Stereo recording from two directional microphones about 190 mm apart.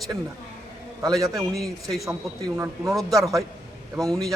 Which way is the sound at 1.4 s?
Centre (ahead or behind).